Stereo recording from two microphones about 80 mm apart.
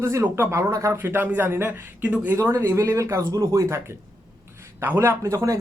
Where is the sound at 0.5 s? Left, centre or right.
Right.